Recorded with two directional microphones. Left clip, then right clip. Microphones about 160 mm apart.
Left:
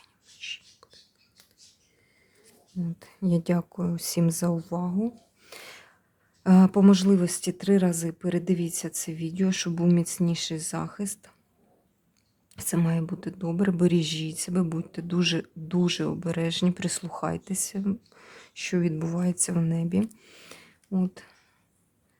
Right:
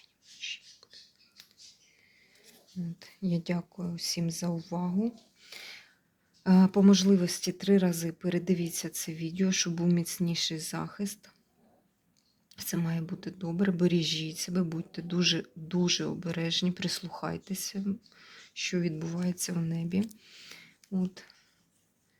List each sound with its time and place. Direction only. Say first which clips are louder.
2.4 s speech: left 6 dB; 30° left (ahead or behind)
4.7 s speech: left 3 dB; 20° left (ahead or behind)
5.5 s a sound: left 1 dB; 35° left (ahead or behind)
6.4 s speech: left 4 dB; 35° left (ahead or behind)
12.5 s speech: left 6 dB; 40° left (ahead or behind)
20.3 s a sound: left 1 dB; 30° left (ahead or behind)
21.1 s speech: left 2 dB; 30° left (ahead or behind)